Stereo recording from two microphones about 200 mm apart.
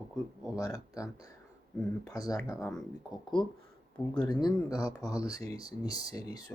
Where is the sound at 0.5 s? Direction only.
15° left (ahead or behind).